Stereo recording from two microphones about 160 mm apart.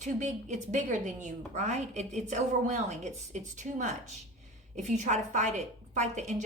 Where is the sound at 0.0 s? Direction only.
45° right (ahead or behind).